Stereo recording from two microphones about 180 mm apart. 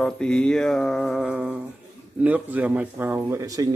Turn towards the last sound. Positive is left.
turn(degrees=-15)  # may be behind; listen again after turning